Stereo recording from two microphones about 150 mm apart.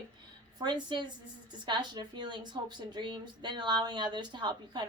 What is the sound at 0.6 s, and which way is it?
A woman's voice, 30° right (ahead or behind).